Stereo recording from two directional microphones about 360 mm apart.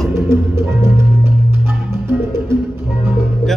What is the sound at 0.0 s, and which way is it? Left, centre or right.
Music, centre.